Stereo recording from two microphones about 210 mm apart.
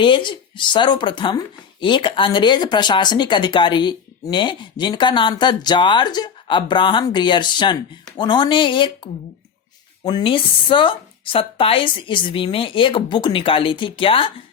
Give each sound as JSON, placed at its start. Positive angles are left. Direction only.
{"t": 0.0, "sound": "speech", "side_deg": 20}
{"t": 10.0, "sound": "speech", "side_deg": 20}